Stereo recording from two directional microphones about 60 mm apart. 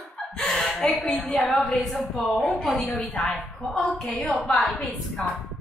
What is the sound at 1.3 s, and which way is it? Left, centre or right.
Speech, centre.